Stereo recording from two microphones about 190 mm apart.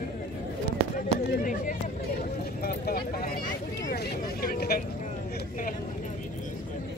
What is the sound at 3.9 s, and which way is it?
Vehicle, 55° left (ahead or behind).